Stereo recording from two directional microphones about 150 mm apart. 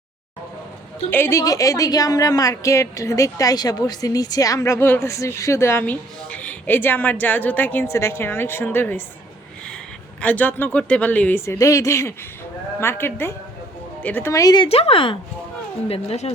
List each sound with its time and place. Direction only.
1.1 s a woman's voice: 15° left (ahead or behind)
10.2 s a woman's voice: 10° left (ahead or behind); by 16.3 s 40° left (ahead or behind)